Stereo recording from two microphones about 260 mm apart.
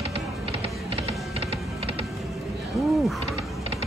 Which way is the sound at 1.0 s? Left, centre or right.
Right.